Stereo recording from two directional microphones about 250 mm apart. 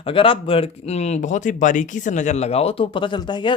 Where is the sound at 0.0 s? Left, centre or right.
Left.